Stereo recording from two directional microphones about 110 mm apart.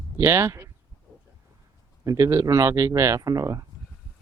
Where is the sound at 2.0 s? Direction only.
30° right (ahead or behind).